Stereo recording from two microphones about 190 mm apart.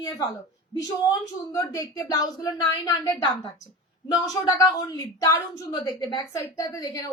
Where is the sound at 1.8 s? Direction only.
20° left (ahead or behind).